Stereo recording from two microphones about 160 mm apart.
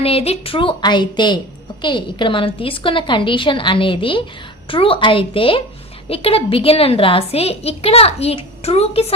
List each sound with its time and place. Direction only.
0.0 s a woman's voice: 40° left (ahead or behind)